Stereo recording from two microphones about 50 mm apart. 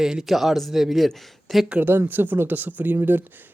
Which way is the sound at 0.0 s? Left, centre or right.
Centre.